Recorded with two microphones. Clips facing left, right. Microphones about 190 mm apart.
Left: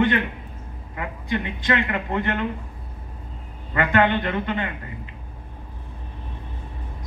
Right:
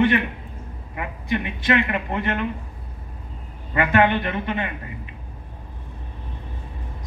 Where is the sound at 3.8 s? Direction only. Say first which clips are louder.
Right 1 dB; 20° right (ahead or behind).